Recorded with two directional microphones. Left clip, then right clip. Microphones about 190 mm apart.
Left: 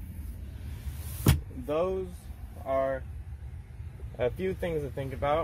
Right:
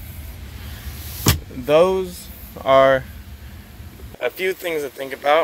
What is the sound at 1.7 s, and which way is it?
Speech, 25° right (ahead or behind).